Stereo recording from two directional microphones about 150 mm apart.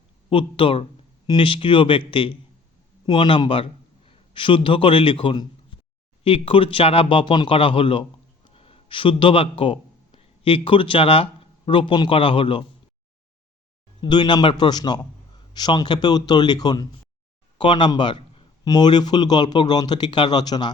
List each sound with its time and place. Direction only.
0.3 s a man's voice: 35° left (ahead or behind)
14.0 s a man's voice: 30° left (ahead or behind)